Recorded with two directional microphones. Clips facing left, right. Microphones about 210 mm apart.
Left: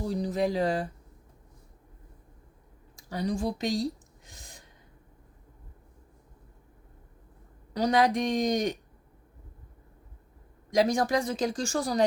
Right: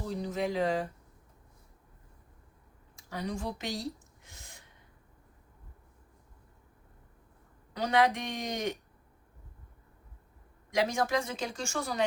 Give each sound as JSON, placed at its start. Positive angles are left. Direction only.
{"t": 0.0, "sound": "speech", "side_deg": 35}
{"t": 2.9, "sound": "speech", "side_deg": 35}
{"t": 4.3, "sound": "gasp", "side_deg": 35}
{"t": 7.7, "sound": "speech", "side_deg": 35}
{"t": 10.7, "sound": "speech", "side_deg": 35}